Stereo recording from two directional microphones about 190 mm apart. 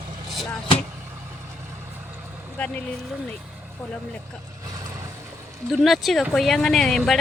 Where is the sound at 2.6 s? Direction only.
5° left (ahead or behind).